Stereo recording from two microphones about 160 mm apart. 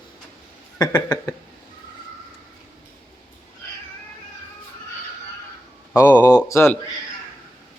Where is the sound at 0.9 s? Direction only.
15° left (ahead or behind).